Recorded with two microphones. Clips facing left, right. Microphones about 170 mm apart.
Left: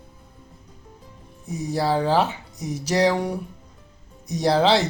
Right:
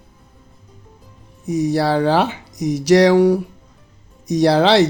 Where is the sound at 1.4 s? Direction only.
85° right.